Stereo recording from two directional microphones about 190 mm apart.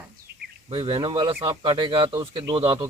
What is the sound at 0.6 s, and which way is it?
Speech, 25° right (ahead or behind).